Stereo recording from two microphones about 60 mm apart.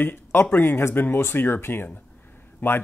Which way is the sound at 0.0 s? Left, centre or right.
Left.